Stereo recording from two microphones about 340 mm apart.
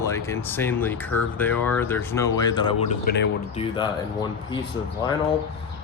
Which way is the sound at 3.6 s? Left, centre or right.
Centre.